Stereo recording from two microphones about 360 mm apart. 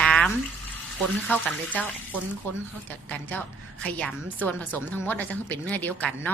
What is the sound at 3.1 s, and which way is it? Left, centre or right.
Speech, centre.